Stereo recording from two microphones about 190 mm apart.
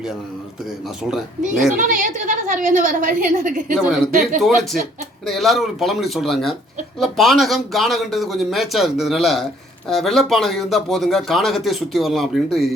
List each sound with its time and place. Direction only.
1.7 s a woman's voice: 45° right (ahead or behind)
3.8 s speech: 5° right (ahead or behind)